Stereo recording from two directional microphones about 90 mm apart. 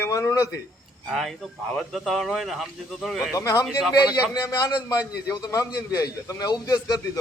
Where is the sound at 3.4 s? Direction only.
35° left (ahead or behind).